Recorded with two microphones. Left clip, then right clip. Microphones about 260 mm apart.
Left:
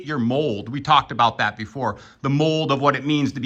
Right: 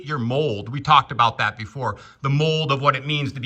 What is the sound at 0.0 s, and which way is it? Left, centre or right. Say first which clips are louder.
Speech: left 1 dB; centre.